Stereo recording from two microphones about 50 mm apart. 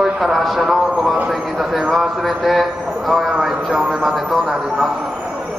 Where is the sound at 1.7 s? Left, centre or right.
Centre.